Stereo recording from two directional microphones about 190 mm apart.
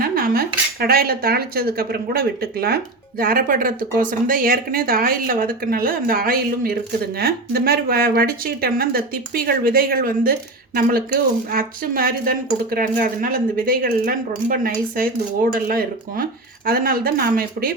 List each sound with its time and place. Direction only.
0.0 s speech: 50° right (ahead or behind)
11.5 s speech: 50° right (ahead or behind)